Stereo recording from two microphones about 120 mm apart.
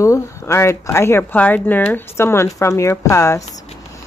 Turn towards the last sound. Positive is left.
turn(degrees=25)  # may be behind; listen again after turning